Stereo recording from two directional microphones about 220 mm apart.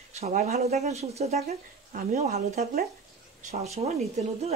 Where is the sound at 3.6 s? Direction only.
30° right (ahead or behind).